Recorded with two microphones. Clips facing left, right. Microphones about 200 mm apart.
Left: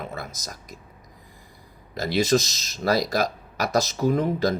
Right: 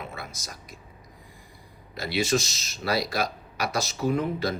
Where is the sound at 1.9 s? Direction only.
40° left (ahead or behind).